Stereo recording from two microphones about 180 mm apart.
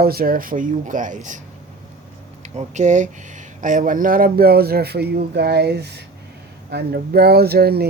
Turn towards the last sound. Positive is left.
turn(degrees=-60)  # may be behind; listen again after turning